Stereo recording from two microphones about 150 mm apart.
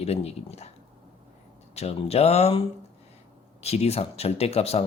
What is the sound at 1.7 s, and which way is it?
Speech, 45° left (ahead or behind).